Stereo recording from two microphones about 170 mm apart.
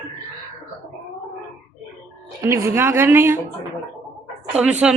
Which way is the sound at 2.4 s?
15° right (ahead or behind).